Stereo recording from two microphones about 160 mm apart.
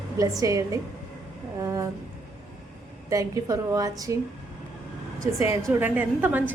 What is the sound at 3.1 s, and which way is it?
A woman's voice, 20° right (ahead or behind).